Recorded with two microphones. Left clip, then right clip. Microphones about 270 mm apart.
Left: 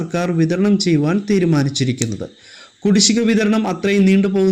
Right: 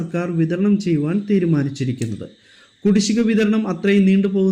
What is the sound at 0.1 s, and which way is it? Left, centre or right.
A man's voice, centre.